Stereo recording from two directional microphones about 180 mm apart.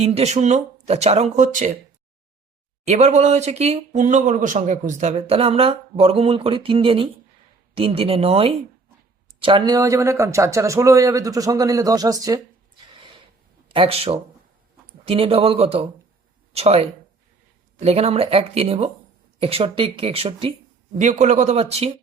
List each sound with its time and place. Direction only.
0.0 s speech: 35° right (ahead or behind)
2.8 s speech: 40° right (ahead or behind); by 12.4 s 20° right (ahead or behind)
13.7 s speech: 30° right (ahead or behind)